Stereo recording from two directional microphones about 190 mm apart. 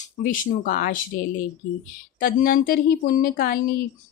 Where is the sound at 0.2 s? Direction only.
50° left (ahead or behind).